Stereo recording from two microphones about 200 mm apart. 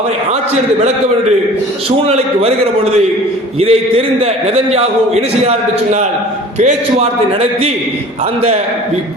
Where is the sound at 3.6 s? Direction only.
30° right (ahead or behind).